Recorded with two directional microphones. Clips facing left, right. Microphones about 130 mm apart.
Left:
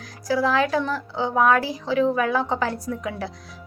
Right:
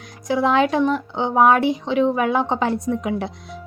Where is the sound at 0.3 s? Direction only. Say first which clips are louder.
Right 3 dB; 25° right (ahead or behind).